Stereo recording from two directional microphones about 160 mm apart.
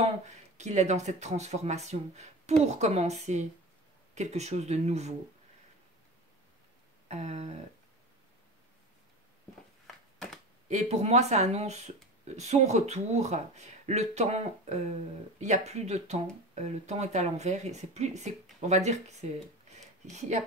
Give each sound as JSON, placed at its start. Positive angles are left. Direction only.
{"t": 0.0, "sound": "speech", "side_deg": -45}
{"t": 7.1, "sound": "speech", "side_deg": -45}
{"t": 10.1, "sound": "a sound", "side_deg": 5}
{"t": 10.7, "sound": "speech", "side_deg": -45}